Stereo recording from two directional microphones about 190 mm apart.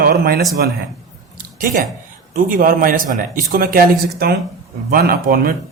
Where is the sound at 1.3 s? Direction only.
45° right (ahead or behind).